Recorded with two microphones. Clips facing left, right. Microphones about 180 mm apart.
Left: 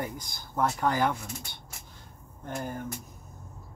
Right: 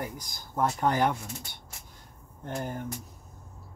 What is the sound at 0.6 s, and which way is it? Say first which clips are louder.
Speech: right 1 dB; 20° right (ahead or behind).